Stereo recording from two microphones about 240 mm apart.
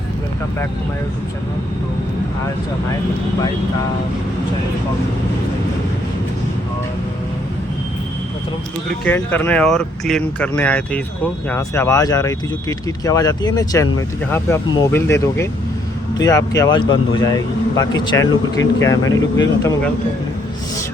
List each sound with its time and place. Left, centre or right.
9.0 s speech: centre